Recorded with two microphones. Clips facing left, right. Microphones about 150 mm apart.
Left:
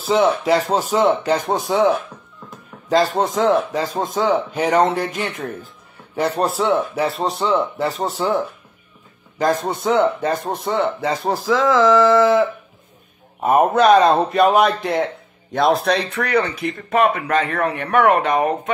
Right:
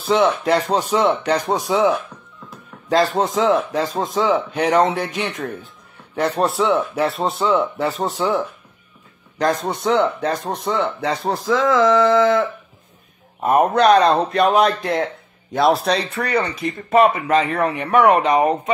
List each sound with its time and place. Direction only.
0.0 s speech: centre (ahead or behind)
16.2 s speech: 20° right (ahead or behind)
16.9 s speech: 5° right (ahead or behind)